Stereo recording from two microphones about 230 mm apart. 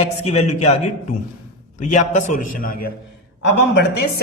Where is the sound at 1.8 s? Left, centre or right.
Left.